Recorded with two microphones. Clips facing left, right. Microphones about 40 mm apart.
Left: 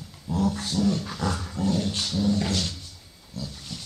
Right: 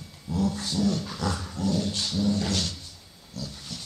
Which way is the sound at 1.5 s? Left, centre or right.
Left.